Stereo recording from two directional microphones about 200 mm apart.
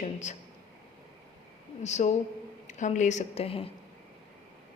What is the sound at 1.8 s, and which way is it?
A woman's voice, 35° left (ahead or behind).